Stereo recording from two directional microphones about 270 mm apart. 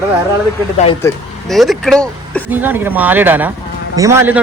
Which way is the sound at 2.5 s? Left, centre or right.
Centre.